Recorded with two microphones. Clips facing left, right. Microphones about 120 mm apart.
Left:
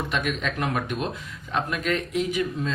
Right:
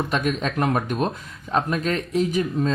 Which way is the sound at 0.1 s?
40° right (ahead or behind).